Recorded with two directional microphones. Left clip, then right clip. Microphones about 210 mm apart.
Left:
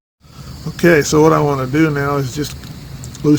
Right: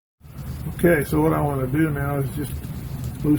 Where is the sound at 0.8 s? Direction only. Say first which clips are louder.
Left 8 dB; 45° left (ahead or behind).